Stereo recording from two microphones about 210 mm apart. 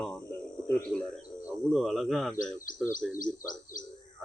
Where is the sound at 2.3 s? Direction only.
40° left (ahead or behind).